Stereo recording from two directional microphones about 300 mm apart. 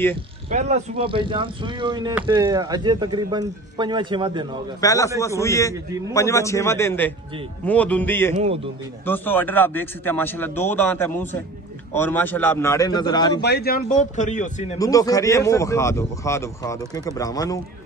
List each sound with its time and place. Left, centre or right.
0.5 s speech: right
4.8 s a man's voice: centre
13.4 s speech: left
14.8 s speech: centre